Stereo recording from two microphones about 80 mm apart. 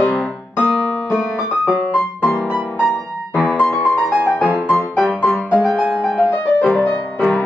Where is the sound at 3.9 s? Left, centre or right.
Centre.